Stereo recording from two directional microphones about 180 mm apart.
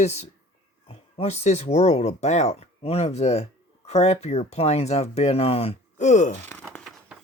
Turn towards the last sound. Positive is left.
turn(degrees=5)  # may be behind; listen again after turning